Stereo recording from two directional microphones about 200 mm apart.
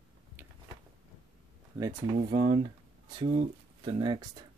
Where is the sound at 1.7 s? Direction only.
20° right (ahead or behind).